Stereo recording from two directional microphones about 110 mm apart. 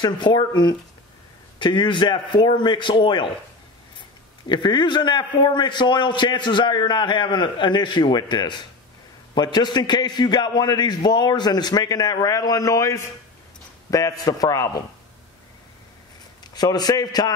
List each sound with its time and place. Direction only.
0.0 s a man's voice: 40° left (ahead or behind)
4.5 s a man's voice: 40° left (ahead or behind)
16.5 s a man's voice: 35° left (ahead or behind)